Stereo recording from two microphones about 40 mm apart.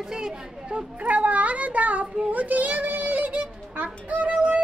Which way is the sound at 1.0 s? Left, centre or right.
Right.